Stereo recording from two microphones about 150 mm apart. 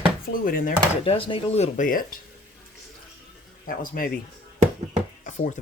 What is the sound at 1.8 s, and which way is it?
Speech, 65° left (ahead or behind).